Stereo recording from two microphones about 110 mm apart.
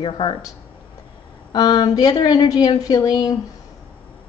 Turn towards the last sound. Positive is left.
turn(degrees=35)  # may be behind; listen again after turning